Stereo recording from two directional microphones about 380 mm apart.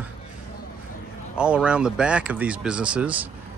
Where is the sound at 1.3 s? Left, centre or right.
Centre.